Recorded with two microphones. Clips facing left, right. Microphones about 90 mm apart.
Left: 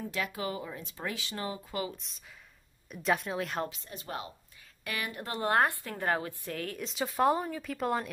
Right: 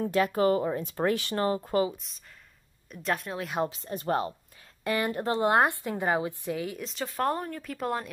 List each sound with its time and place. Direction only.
0.0 s speech: 45° right (ahead or behind)
2.0 s speech: centre (ahead or behind)
3.6 s speech: 35° right (ahead or behind)
4.8 s a woman's voice: 35° right (ahead or behind)
5.4 s a woman's voice: 20° right (ahead or behind)
6.9 s speech: 10° left (ahead or behind)